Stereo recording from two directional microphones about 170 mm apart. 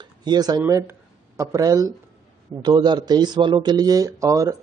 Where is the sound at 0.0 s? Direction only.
25° right (ahead or behind).